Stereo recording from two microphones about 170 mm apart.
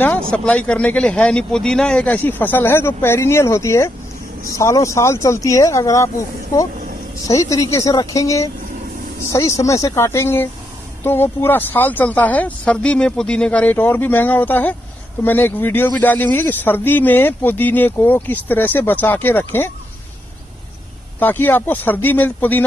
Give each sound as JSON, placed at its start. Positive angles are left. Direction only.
{"t": 0.3, "sound": "a woman's voice", "side_deg": 5}
{"t": 21.2, "sound": "speech", "side_deg": 10}